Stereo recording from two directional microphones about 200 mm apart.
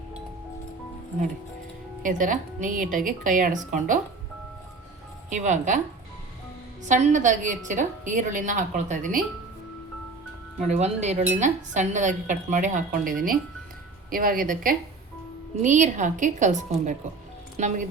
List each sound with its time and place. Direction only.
2.0 s dishes: 40° right (ahead or behind)
5.3 s dishes: 35° right (ahead or behind)
6.8 s dishes: 40° right (ahead or behind)
10.7 s dishes: 35° right (ahead or behind)
14.1 s a woman's voice: 45° right (ahead or behind)
15.6 s dishes: 40° right (ahead or behind)